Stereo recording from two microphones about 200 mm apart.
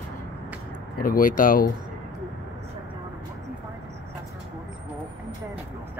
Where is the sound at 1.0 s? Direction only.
45° left (ahead or behind).